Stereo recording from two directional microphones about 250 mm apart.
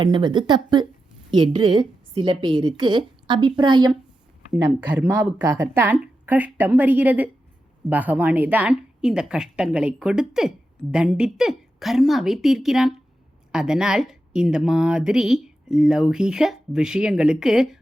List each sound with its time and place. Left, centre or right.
0.0 s speech: centre
4.5 s speech: centre